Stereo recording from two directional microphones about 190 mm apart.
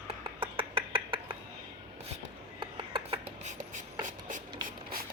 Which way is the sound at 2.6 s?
25° right (ahead or behind).